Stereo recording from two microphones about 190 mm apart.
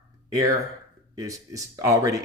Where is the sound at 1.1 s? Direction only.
20° right (ahead or behind).